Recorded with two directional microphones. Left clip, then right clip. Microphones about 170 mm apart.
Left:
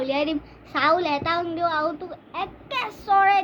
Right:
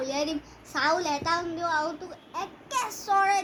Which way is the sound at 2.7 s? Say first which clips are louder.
Left 4 dB; 40° left (ahead or behind).